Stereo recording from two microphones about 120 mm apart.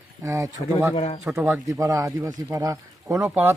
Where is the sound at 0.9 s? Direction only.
55° left (ahead or behind).